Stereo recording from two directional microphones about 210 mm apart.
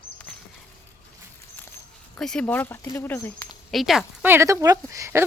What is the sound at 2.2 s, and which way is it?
Speech, 5° left (ahead or behind).